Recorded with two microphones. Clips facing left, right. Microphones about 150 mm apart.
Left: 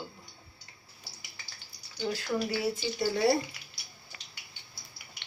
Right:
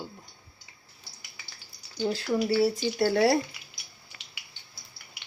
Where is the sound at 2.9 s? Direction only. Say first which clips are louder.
Right 3 dB; 65° right (ahead or behind).